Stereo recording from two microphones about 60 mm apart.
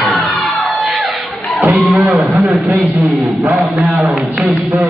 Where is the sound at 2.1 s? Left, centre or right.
Right.